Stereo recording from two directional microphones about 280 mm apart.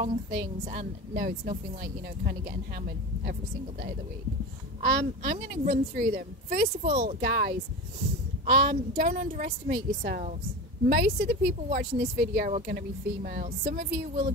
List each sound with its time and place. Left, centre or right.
0.0 s a woman's voice: right
4.8 s speech: right